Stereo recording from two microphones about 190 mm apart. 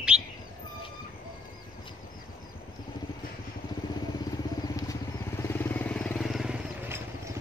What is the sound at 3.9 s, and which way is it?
Vehicle, 20° left (ahead or behind).